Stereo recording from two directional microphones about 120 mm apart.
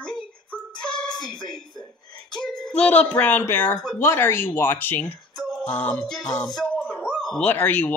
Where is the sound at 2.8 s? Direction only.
10° left (ahead or behind).